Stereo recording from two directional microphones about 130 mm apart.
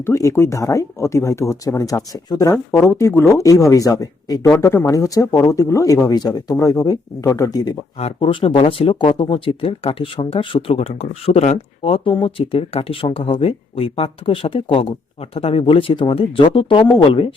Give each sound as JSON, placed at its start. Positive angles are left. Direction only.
{"t": 0.0, "sound": "speech", "side_deg": 20}
{"t": 7.9, "sound": "speech", "side_deg": 50}